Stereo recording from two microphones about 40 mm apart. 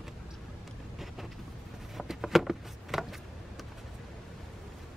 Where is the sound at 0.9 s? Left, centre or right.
Centre.